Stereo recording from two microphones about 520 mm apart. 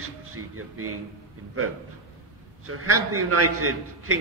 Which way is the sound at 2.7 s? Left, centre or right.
Right.